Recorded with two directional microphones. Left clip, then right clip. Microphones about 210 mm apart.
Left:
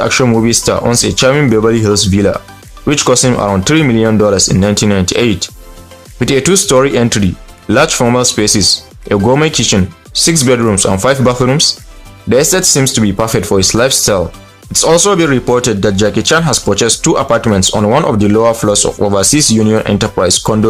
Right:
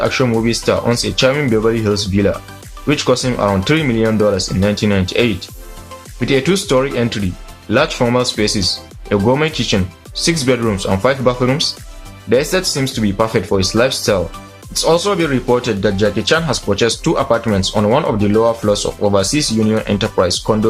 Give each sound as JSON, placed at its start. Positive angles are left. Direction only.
{"t": 0.0, "sound": "speech", "side_deg": 50}